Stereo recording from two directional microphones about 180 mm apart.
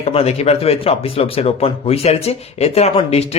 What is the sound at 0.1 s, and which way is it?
Speech, 35° left (ahead or behind).